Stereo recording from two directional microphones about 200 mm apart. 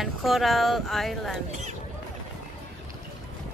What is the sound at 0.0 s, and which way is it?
Speech, centre (ahead or behind).